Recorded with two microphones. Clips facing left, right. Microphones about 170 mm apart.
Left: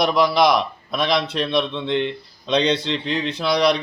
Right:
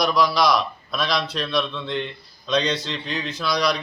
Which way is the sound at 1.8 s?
65° left (ahead or behind).